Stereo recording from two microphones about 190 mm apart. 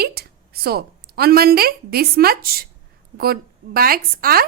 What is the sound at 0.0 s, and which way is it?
A woman's voice, 55° right (ahead or behind).